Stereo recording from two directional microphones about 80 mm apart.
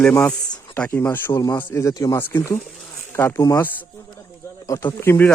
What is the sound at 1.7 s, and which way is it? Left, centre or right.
Speech, left.